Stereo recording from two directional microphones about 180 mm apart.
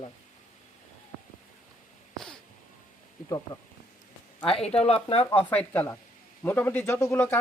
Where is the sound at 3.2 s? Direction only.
20° left (ahead or behind).